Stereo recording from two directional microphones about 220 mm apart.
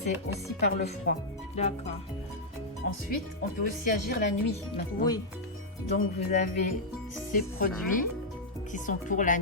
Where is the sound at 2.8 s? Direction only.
40° left (ahead or behind).